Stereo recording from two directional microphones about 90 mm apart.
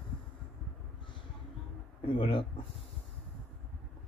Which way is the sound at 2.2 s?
75° left (ahead or behind).